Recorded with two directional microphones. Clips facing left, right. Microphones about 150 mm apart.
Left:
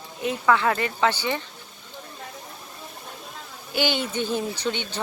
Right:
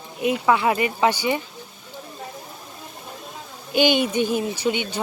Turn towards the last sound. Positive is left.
turn(degrees=-10)  # may be behind; listen again after turning